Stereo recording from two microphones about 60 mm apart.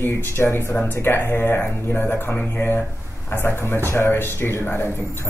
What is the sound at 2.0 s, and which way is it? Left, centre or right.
Speech, left.